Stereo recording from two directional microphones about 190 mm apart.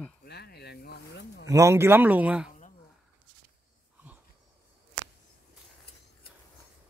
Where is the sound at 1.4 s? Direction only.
15° right (ahead or behind).